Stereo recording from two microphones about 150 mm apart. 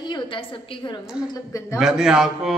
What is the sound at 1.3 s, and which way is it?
Speech, 20° left (ahead or behind).